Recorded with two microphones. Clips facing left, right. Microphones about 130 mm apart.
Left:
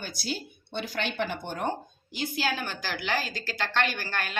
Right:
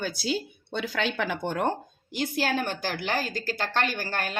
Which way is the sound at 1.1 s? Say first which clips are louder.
Right 3 dB; 90° right.